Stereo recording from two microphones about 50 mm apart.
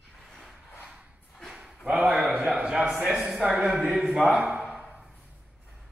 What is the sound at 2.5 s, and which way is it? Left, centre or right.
Speech, centre.